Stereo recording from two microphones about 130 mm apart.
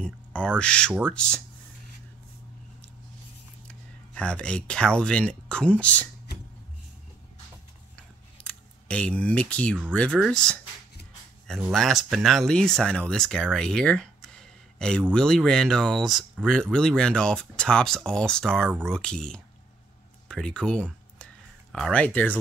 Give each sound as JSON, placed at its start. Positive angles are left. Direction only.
{"t": 0.0, "sound": "speech", "side_deg": 10}
{"t": 3.6, "sound": "speech", "side_deg": 10}
{"t": 8.4, "sound": "a sound", "side_deg": 10}
{"t": 9.9, "sound": "speech", "side_deg": 5}
{"t": 11.7, "sound": "speech", "side_deg": 0}